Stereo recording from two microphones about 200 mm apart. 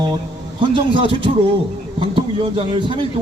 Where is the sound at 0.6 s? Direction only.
25° right (ahead or behind).